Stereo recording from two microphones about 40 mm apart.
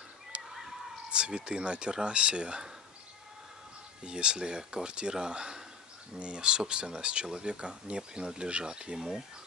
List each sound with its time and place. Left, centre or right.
0.5 s a sound: centre
1.1 s speech: right
4.0 s speech: right